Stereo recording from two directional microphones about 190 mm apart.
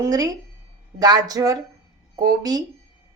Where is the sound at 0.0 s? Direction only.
20° right (ahead or behind).